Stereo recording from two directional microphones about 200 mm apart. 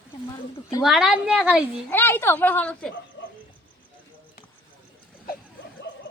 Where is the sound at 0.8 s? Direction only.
Centre (ahead or behind).